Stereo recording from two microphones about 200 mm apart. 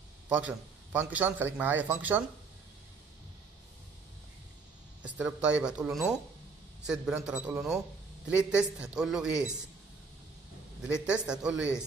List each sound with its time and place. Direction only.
0.3 s a man's voice: 5° right (ahead or behind)
5.0 s speech: 5° right (ahead or behind)
10.9 s speech: 5° right (ahead or behind)